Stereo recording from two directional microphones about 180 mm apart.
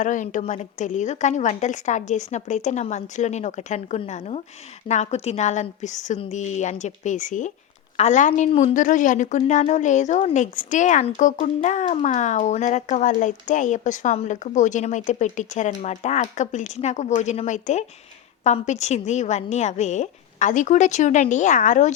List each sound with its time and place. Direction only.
0.0 s a woman's voice: 45° left (ahead or behind)